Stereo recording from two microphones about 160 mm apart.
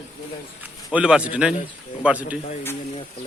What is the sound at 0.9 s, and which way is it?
Speech, 5° right (ahead or behind).